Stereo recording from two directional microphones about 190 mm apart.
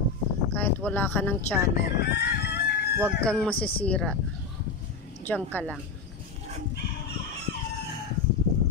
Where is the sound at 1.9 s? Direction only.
60° left (ahead or behind).